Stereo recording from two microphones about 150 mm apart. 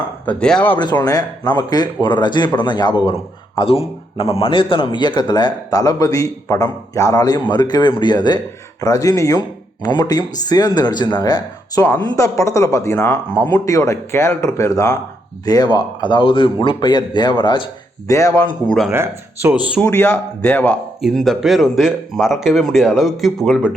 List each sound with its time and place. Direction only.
0.3 s a man's voice: 5° left (ahead or behind)
0.8 s a man's voice: 30° left (ahead or behind)
18.9 s speech: 15° right (ahead or behind)
19.8 s a man's voice: 15° left (ahead or behind); by 23.7 s 5° right (ahead or behind)